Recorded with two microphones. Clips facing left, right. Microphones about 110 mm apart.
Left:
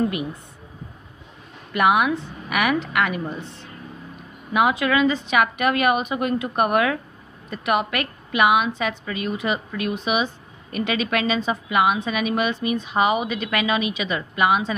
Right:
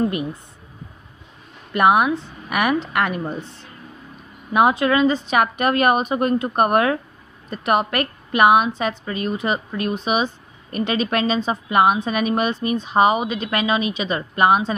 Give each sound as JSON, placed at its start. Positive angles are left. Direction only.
{"t": 1.7, "sound": "a woman's voice", "side_deg": -35}
{"t": 4.6, "sound": "a woman's voice", "side_deg": -35}